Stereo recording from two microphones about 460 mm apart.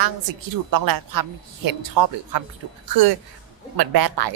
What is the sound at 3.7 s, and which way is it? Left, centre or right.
Speech, right.